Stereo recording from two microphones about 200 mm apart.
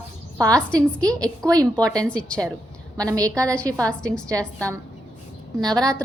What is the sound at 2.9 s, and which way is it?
Speech, 20° right (ahead or behind).